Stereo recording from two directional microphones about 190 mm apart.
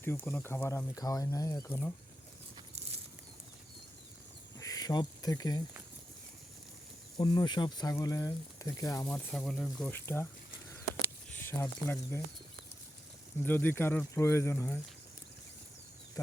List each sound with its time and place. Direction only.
0.0 s speech: 10° left (ahead or behind)
2.7 s a sound: 35° right (ahead or behind)
4.5 s cricket: 20° left (ahead or behind)
7.2 s speech: 20° left (ahead or behind); by 10.0 s centre (ahead or behind)
11.3 s speech: 10° left (ahead or behind)
13.4 s speech: 10° left (ahead or behind)
16.2 s speech: 15° left (ahead or behind)